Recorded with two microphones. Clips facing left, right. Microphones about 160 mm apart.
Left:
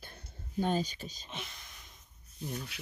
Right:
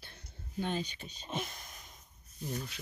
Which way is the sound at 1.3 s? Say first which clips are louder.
Right 6 dB; 45° right (ahead or behind).